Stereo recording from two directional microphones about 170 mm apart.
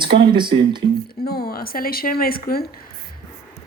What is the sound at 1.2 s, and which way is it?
A woman's voice, 65° left (ahead or behind).